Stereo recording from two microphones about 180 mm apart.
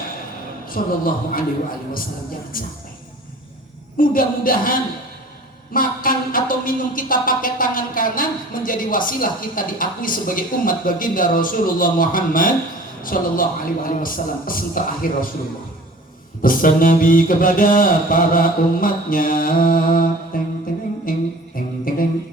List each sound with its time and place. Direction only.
0.7 s music: 50° left (ahead or behind)
2.5 s music: 50° left (ahead or behind)
3.9 s music: 50° left (ahead or behind)
16.4 s music: 50° left (ahead or behind)